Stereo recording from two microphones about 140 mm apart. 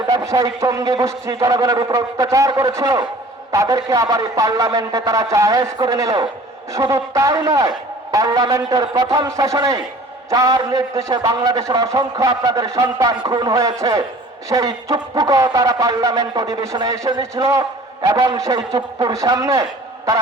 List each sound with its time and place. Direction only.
0.1 s a man's voice: 25° right (ahead or behind)